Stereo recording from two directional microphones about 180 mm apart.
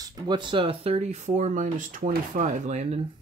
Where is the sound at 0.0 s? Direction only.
25° right (ahead or behind).